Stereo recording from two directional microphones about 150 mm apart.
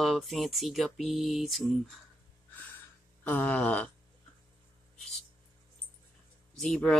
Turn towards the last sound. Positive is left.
turn(degrees=5)  # may be behind; listen again after turning